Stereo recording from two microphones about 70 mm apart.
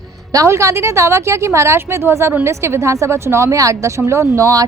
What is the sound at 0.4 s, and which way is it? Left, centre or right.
Speech, right.